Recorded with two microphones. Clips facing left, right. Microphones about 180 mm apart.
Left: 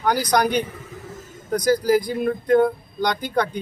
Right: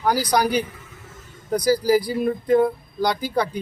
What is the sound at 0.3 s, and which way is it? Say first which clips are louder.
A man's voice: left 1 dB; 5° right (ahead or behind).